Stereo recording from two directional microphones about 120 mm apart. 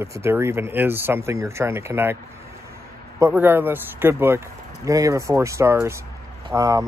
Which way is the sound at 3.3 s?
15° right (ahead or behind).